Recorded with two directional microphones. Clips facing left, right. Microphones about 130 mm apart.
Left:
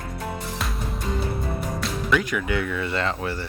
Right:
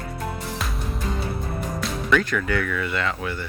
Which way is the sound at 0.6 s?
Centre (ahead or behind).